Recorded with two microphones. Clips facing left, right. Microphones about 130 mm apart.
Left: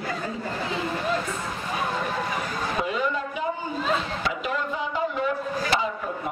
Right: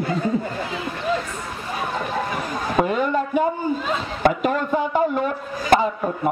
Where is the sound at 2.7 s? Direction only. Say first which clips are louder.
Right 8 dB; 50° right (ahead or behind).